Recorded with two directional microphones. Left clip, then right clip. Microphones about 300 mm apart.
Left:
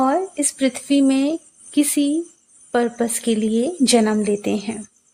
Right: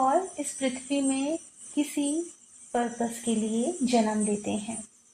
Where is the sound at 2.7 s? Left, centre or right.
Left.